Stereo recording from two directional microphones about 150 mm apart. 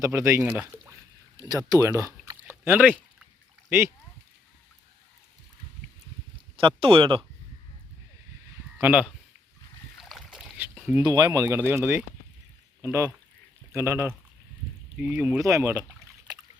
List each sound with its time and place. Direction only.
0.0 s speech: 15° right (ahead or behind)
6.6 s speech: 35° right (ahead or behind)
8.8 s speech: 10° right (ahead or behind)
10.0 s rowboat: centre (ahead or behind)
11.0 s speech: 25° right (ahead or behind); by 15.4 s 10° right (ahead or behind)
15.4 s a sound: 20° right (ahead or behind)